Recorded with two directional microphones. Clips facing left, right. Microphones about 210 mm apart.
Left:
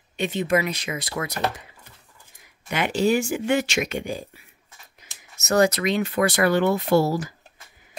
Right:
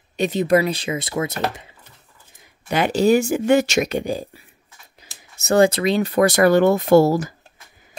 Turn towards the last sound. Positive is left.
turn(degrees=-45)  # may be behind; listen again after turning